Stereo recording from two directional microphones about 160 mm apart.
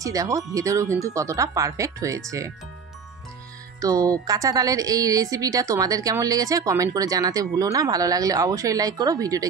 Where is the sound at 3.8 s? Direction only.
20° right (ahead or behind).